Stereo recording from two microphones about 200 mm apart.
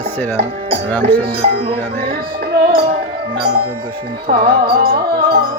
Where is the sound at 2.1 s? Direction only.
50° right (ahead or behind).